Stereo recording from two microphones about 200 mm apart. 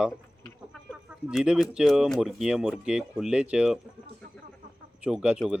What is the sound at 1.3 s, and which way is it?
Speech, 5° right (ahead or behind).